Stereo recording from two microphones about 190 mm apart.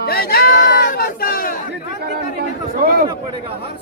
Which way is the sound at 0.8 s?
50° left (ahead or behind).